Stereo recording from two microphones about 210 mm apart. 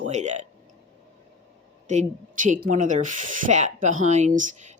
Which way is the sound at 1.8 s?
35° right (ahead or behind).